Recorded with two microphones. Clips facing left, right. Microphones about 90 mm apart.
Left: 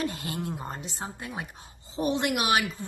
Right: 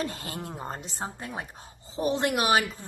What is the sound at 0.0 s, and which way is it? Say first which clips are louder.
A woman's voice: left 2 dB; 35° right (ahead or behind).